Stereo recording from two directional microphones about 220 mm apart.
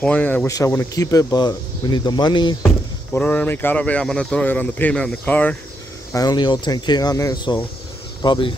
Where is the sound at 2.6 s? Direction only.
5° left (ahead or behind).